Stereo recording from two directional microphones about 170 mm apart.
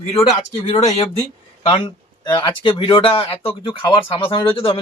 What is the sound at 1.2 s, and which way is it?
Speech, 35° left (ahead or behind).